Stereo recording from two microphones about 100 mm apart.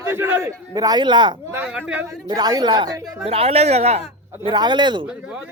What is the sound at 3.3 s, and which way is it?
Speech, 85° right.